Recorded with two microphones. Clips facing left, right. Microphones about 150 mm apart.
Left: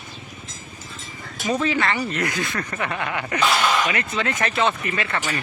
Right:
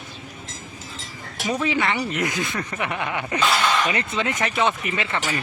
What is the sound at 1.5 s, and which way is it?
Speech, 15° right (ahead or behind).